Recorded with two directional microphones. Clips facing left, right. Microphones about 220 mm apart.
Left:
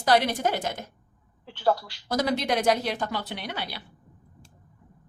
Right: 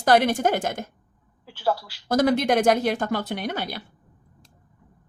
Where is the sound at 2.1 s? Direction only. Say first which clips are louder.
Right 6 dB; 50° right (ahead or behind).